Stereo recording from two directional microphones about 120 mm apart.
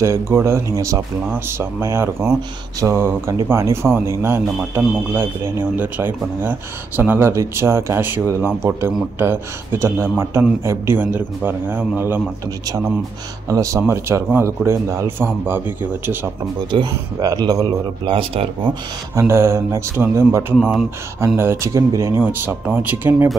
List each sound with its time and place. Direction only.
0.0 s a man's voice: 25° right (ahead or behind)
13.5 s speech: 25° right (ahead or behind)
16.7 s speech: 30° right (ahead or behind)
18.1 s speech: 50° right (ahead or behind)
19.1 s speech: 20° right (ahead or behind)